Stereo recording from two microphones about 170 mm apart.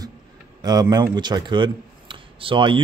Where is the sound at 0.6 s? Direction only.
25° right (ahead or behind).